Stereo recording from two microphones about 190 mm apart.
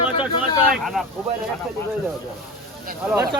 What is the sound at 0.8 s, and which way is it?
Speech, centre (ahead or behind).